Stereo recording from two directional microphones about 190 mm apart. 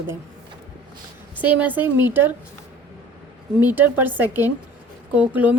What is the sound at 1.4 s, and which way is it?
Speech, 10° right (ahead or behind).